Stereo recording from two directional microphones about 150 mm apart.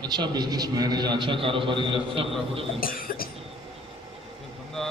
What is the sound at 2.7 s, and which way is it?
Cough, 70° left (ahead or behind).